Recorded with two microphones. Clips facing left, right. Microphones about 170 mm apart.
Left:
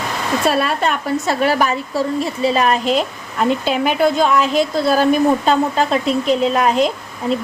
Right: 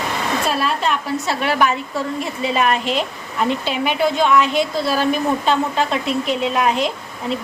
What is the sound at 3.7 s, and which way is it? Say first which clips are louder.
Speech: left 3 dB; 45° left (ahead or behind).